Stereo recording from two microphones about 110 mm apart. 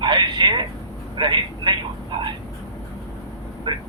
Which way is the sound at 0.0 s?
45° right (ahead or behind).